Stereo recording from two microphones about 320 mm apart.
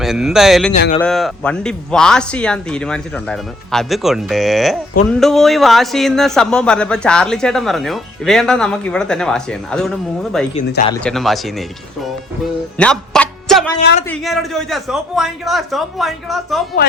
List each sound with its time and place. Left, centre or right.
0.0 s speech: centre
0.7 s speech: left
1.0 s speech: centre
10.5 s speech: left
10.9 s speech: centre
12.7 s music: centre
14.1 s speech: centre